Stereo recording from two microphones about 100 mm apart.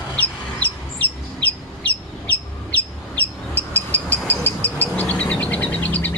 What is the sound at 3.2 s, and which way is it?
Vehicle, 15° left (ahead or behind).